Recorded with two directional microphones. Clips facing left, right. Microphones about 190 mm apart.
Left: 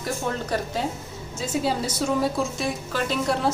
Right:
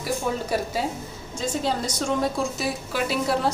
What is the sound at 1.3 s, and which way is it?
A woman's voice, 5° left (ahead or behind).